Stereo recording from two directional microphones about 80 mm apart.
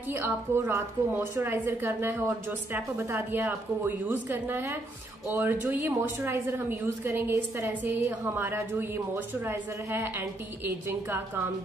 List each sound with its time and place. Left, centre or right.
0.1 s a woman's voice: right